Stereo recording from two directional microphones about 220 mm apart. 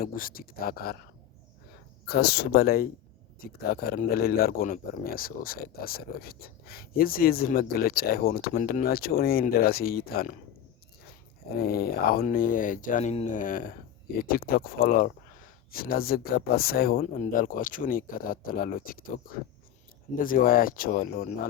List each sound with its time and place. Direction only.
0.0 s speech: 40° left (ahead or behind)
2.0 s speech: 45° left (ahead or behind)
11.5 s speech: 45° left (ahead or behind)